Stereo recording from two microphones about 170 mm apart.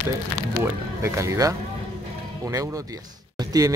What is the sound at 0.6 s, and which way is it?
Speech, 15° right (ahead or behind).